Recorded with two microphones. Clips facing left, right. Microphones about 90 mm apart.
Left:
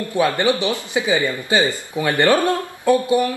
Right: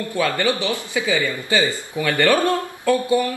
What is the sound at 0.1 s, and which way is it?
Speech, 20° left (ahead or behind).